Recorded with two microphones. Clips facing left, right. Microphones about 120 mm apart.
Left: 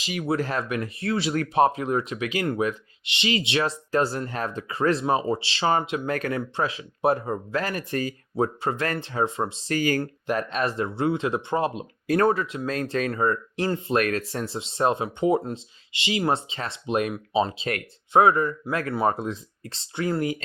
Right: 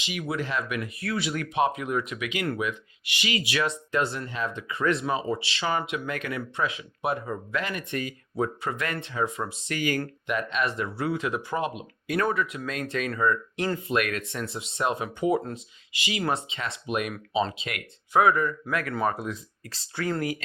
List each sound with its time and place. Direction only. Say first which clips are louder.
0.0 s speech: left 5 dB; 35° left (ahead or behind)
3.0 s speech: left 4 dB; 25° left (ahead or behind)